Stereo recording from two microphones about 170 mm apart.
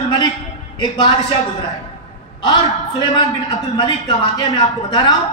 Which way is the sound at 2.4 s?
25° left (ahead or behind).